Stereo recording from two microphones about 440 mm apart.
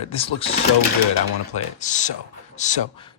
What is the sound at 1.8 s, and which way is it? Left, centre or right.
Speech, centre.